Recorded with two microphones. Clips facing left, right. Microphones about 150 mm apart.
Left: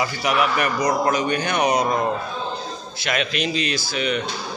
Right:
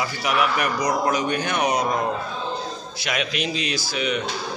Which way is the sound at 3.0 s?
5° right (ahead or behind).